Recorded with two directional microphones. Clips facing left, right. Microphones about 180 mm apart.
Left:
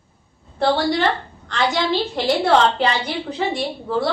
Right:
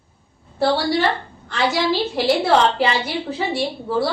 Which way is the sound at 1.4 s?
5° right (ahead or behind).